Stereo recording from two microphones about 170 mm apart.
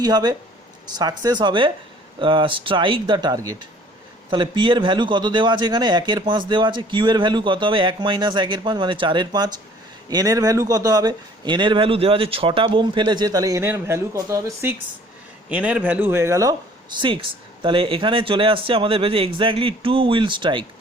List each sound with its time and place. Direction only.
0.0 s a man's voice: 25° right (ahead or behind)
17.0 s speech: 30° right (ahead or behind)